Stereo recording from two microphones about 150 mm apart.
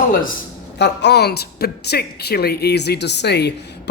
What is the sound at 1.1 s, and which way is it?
Speech, 90° left.